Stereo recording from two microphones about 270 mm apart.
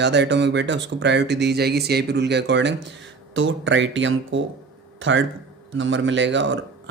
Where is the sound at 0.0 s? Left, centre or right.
Right.